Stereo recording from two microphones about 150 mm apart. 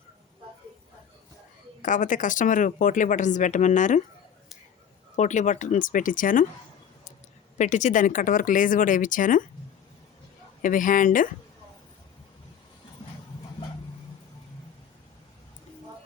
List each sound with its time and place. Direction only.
1.8 s speech: 60° left (ahead or behind)
5.1 s speech: 55° left (ahead or behind)
7.6 s speech: 55° left (ahead or behind)
10.6 s speech: 60° left (ahead or behind)